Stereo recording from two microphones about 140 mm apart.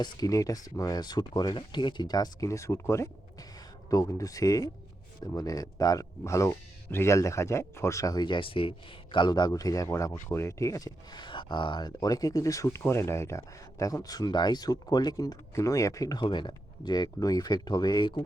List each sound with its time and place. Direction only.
0.0 s speech: 25° left (ahead or behind)